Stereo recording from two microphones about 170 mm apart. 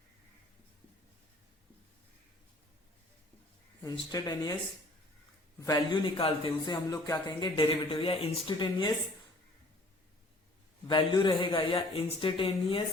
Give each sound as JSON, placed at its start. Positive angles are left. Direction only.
{"t": 4.1, "sound": "speech", "side_deg": 20}
{"t": 5.5, "sound": "speech", "side_deg": 20}
{"t": 10.8, "sound": "speech", "side_deg": 25}